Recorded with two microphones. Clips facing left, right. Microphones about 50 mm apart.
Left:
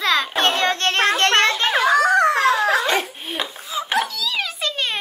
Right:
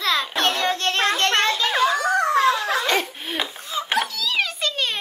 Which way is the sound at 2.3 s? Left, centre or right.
Centre.